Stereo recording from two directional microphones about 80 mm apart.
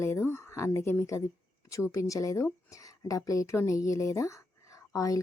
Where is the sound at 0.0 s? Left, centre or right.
Left.